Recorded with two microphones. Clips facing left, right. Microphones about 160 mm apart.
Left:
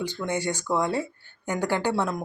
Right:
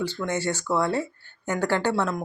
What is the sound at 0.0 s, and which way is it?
Speech, 15° left (ahead or behind).